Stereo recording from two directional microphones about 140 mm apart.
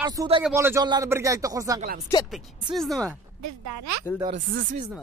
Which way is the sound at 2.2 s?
Centre (ahead or behind).